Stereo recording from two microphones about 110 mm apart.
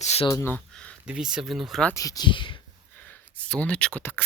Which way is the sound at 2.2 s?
50° left (ahead or behind).